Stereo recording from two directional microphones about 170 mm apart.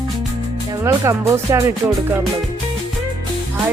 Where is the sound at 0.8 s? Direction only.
15° right (ahead or behind).